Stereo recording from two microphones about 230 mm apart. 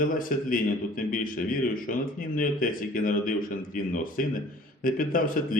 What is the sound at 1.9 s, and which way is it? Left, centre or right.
A man's voice, left.